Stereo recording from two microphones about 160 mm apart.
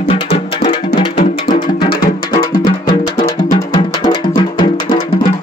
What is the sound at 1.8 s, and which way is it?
Music, 60° left (ahead or behind).